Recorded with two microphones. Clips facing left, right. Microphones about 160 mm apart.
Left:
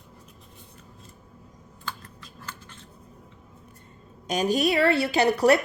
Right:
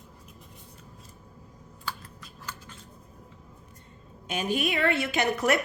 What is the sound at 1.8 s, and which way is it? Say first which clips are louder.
Computer keyboard: even; 10° right (ahead or behind).